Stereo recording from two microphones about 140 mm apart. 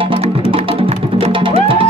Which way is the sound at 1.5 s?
40° right (ahead or behind).